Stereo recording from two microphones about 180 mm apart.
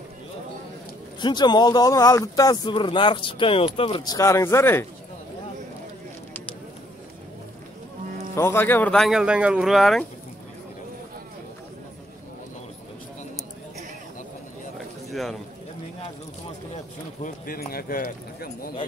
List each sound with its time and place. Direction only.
1.2 s speech: 25° left (ahead or behind)
8.4 s speech: 10° left (ahead or behind)
15.0 s a sound: centre (ahead or behind)
17.2 s speech: 55° left (ahead or behind)